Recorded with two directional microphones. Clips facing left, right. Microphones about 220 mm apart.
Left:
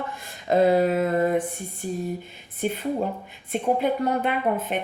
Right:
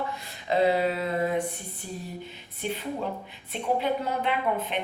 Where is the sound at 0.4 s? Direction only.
45° left (ahead or behind).